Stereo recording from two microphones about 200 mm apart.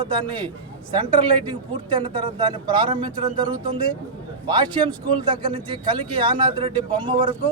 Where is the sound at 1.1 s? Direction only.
25° right (ahead or behind).